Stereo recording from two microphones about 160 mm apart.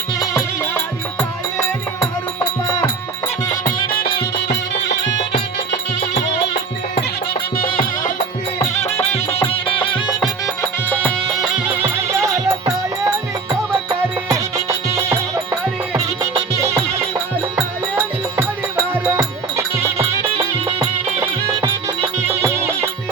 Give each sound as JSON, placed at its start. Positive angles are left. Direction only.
{"t": 0.3, "sound": "music", "side_deg": 15}
{"t": 3.5, "sound": "music", "side_deg": 70}
{"t": 7.5, "sound": "music", "side_deg": 65}
{"t": 8.8, "sound": "music", "side_deg": 40}
{"t": 11.0, "sound": "music", "side_deg": -5}
{"t": 14.3, "sound": "music", "side_deg": -20}
{"t": 19.0, "sound": "music", "side_deg": -15}
{"t": 22.3, "sound": "music", "side_deg": -15}